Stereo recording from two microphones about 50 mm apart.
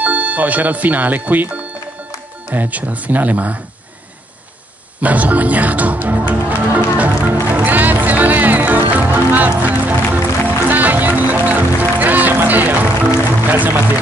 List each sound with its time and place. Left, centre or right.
0.0 s speech: right
5.0 s speech: right
6.6 s music: right
13.5 s speech: right